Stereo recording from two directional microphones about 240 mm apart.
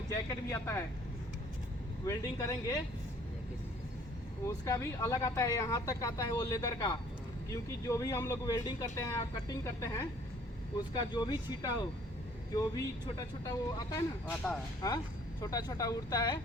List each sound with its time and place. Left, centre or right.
0.1 s speech: centre
2.0 s speech: centre
4.4 s speech: centre